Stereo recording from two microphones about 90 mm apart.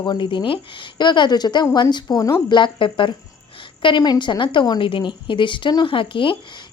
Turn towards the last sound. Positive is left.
turn(degrees=70)  # may be behind; listen again after turning